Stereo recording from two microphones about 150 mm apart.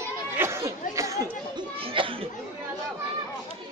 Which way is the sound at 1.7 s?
35° right (ahead or behind).